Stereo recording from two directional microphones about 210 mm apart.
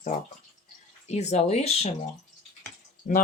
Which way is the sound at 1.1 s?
30° left (ahead or behind).